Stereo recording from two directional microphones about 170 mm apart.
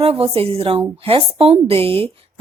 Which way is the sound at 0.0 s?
35° right (ahead or behind).